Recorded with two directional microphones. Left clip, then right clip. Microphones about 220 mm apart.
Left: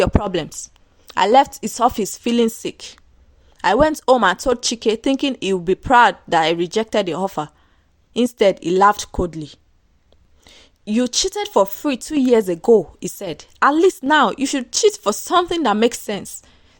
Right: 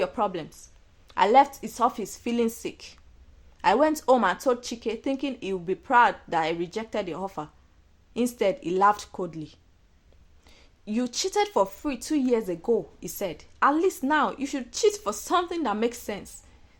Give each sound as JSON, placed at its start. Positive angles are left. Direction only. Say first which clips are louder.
{"t": 0.0, "sound": "speech", "louder": "left 8 dB", "side_deg": 45}